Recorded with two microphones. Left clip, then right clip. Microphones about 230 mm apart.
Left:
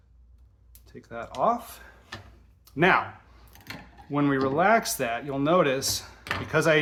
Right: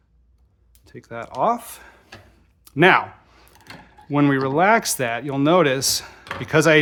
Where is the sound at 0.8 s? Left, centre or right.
Right.